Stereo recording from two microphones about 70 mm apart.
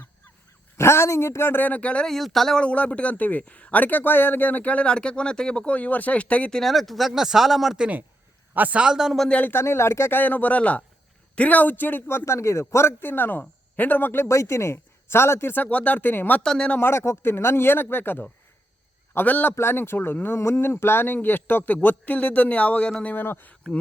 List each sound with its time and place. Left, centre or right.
0.8 s speech: left; by 2.0 s centre
2.0 s speech: centre
2.6 s a man's voice: centre
6.6 s speech: centre
8.5 s a man's voice: right
8.8 s a man's voice: centre
9.5 s a man's voice: left
14.3 s speech: left
16.4 s speech: centre
16.7 s a man's voice: left
19.5 s a man's voice: left; by 23.1 s centre
23.1 s a man's voice: left